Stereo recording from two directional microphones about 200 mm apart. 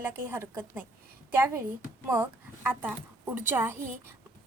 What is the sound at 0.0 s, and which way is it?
A woman's voice, 10° right (ahead or behind).